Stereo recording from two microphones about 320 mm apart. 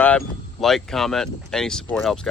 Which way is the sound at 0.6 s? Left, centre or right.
Centre.